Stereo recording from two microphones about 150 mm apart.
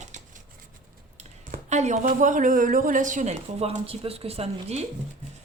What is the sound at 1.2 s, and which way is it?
Speech, 50° right (ahead or behind).